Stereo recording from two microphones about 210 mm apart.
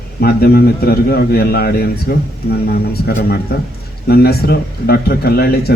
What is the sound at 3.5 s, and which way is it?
A man's voice, 45° left (ahead or behind).